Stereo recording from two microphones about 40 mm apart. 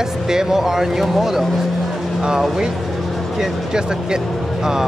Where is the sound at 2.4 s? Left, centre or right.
Centre.